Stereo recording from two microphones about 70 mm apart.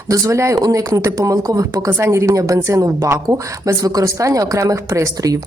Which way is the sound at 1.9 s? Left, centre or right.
Right.